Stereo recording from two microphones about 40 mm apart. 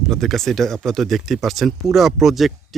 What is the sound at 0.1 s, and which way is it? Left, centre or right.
Speech, centre.